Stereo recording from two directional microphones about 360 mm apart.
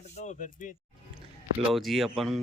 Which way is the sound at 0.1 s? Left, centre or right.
Centre.